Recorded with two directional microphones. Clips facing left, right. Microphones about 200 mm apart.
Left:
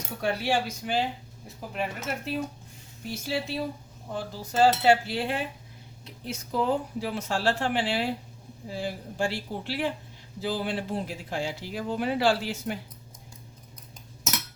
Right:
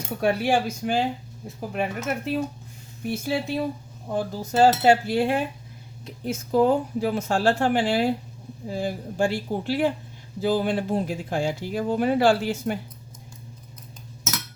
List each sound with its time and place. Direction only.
0.2 s speech: 50° right (ahead or behind)